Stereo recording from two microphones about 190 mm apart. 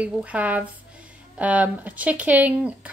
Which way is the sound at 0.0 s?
5° right (ahead or behind).